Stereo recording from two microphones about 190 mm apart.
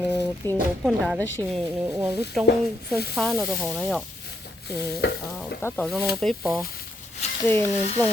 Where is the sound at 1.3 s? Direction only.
10° left (ahead or behind).